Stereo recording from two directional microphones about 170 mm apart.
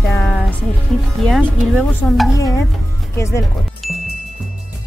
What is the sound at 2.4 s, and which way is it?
Music, 20° left (ahead or behind).